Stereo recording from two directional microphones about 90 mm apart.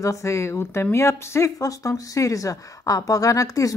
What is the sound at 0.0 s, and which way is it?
Speech, 35° left (ahead or behind).